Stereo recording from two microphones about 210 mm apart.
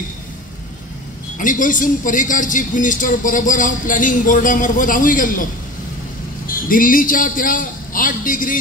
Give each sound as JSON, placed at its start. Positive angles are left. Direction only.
{"t": 1.4, "sound": "a woman's voice", "side_deg": 40}
{"t": 6.5, "sound": "a woman's voice", "side_deg": 40}